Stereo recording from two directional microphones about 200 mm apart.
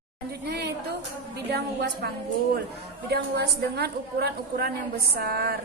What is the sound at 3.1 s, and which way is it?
A woman's voice, 55° right (ahead or behind).